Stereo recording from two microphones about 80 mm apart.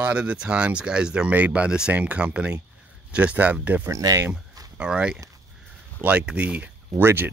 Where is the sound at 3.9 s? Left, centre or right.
Right.